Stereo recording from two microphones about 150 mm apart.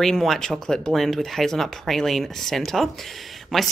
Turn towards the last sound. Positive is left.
turn(degrees=0)  # may be behind; listen again after turning